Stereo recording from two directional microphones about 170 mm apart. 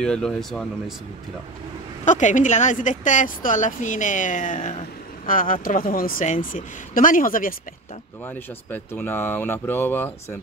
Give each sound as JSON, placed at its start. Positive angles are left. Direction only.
{"t": 0.0, "sound": "speech", "side_deg": 5}
{"t": 2.0, "sound": "a woman's voice", "side_deg": 45}
{"t": 8.3, "sound": "speech", "side_deg": 10}